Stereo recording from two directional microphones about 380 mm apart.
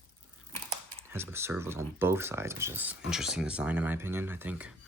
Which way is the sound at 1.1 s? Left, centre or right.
Centre.